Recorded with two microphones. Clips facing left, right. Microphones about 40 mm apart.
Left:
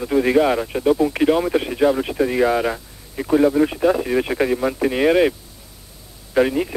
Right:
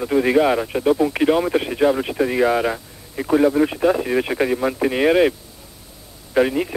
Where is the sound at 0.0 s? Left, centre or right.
Centre.